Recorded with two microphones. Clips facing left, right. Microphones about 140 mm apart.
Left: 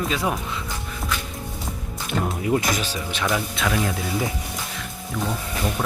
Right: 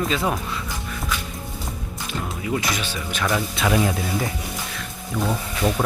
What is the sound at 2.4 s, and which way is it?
Speech, 45° left (ahead or behind).